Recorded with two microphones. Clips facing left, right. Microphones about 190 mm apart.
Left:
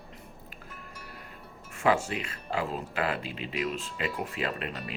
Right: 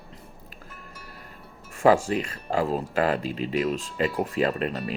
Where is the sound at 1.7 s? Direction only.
40° right (ahead or behind).